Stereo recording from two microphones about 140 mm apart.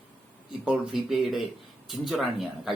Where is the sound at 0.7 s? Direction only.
5° right (ahead or behind).